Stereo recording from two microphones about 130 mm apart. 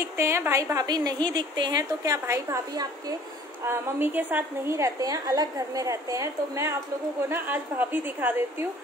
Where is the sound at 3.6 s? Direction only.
15° right (ahead or behind).